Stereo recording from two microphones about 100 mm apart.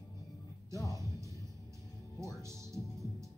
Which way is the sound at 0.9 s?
30° right (ahead or behind).